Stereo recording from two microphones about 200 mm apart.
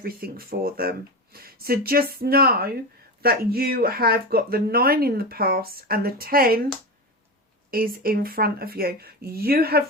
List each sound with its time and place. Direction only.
0.0 s speech: 50° right (ahead or behind)
7.7 s speech: 45° right (ahead or behind)